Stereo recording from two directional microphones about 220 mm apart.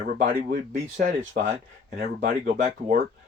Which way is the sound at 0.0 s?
40° right (ahead or behind).